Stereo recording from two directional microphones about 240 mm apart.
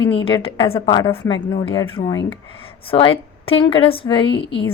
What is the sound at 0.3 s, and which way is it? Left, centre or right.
A woman's voice, left.